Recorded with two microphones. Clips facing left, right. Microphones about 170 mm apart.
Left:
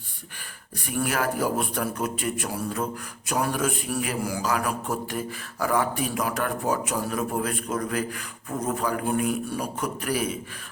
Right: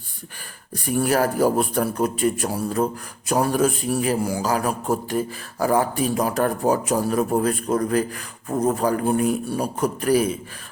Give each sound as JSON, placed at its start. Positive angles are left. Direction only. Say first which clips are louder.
{"t": 0.9, "sound": "a man's voice", "louder": "right 6 dB", "side_deg": -35}